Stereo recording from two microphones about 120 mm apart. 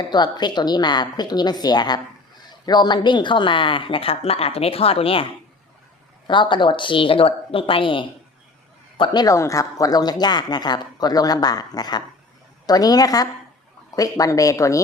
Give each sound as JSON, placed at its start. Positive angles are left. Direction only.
{"t": 0.1, "sound": "a woman's voice", "side_deg": 35}
{"t": 9.0, "sound": "speech", "side_deg": 30}